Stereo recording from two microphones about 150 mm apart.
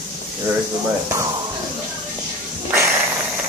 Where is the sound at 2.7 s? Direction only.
20° right (ahead or behind).